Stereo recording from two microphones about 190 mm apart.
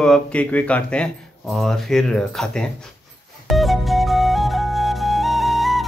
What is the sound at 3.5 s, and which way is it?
Flute, centre (ahead or behind).